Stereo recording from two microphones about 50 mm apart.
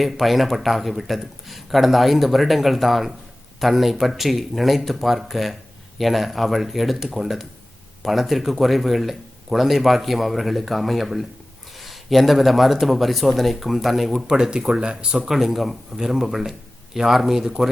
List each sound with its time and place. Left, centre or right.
0.0 s speech: centre
15.3 s speech: centre